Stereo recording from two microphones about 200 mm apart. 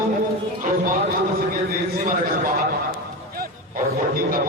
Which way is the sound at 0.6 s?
45° right (ahead or behind).